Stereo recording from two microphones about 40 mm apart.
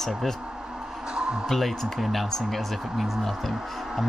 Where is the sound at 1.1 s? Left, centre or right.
Centre.